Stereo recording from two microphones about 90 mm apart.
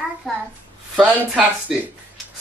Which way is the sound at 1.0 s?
15° right (ahead or behind).